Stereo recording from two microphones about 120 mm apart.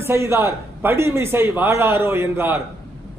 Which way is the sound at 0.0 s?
20° right (ahead or behind).